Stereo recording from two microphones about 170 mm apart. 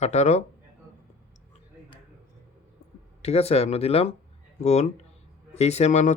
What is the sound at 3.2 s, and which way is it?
Speech, 35° left (ahead or behind).